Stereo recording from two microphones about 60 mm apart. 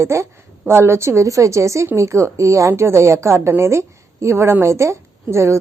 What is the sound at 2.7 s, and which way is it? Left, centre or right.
A woman's voice, right.